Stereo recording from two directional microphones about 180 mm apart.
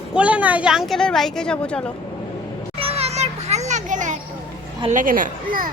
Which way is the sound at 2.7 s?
35° right (ahead or behind).